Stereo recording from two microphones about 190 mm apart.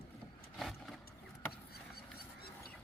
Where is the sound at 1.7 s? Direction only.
55° left (ahead or behind).